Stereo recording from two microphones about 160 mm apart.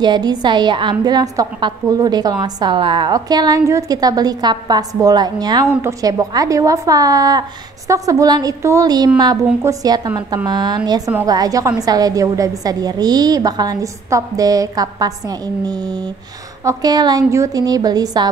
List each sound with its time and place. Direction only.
0.0 s a woman's voice: 25° right (ahead or behind)
11.1 s a woman's voice: 15° right (ahead or behind)